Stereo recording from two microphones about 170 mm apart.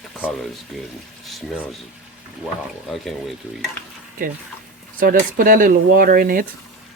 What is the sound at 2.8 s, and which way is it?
Speech, centre (ahead or behind).